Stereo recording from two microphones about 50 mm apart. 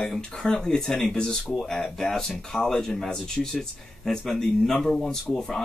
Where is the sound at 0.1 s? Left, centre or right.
Centre.